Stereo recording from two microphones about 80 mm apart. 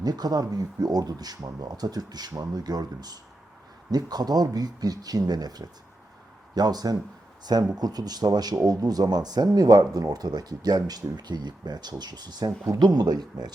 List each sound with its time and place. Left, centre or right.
0.0 s speech: right